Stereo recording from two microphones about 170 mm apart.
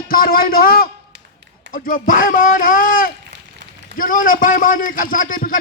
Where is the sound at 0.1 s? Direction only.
60° left (ahead or behind).